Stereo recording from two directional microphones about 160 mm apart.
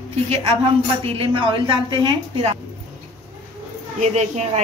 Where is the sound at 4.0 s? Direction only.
45° right (ahead or behind).